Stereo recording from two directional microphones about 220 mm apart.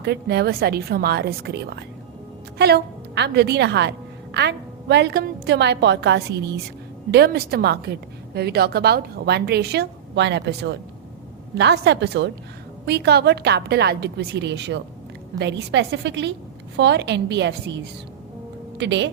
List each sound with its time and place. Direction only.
0.0 s a woman's voice: 50° right (ahead or behind)